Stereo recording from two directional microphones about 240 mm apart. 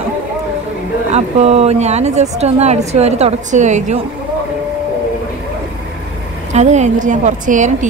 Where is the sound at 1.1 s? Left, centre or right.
Right.